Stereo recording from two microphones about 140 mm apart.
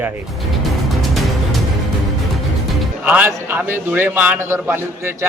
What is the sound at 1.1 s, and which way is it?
Music, centre (ahead or behind).